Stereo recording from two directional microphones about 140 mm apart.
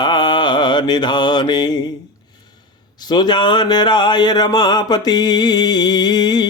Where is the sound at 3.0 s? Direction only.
30° left (ahead or behind).